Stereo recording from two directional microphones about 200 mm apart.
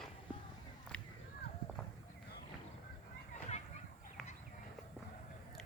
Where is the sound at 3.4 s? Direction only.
35° left (ahead or behind).